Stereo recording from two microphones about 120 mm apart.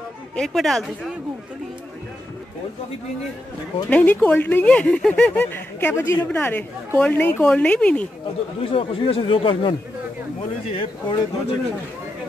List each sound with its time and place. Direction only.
0.4 s speech: centre (ahead or behind)
3.9 s speech: 15° left (ahead or behind)
8.6 s speech: 50° left (ahead or behind)